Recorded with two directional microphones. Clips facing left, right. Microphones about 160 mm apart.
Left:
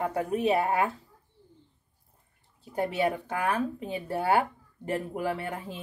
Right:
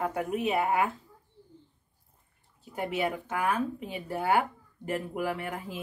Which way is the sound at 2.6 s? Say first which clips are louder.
Left 3 dB; 30° left (ahead or behind).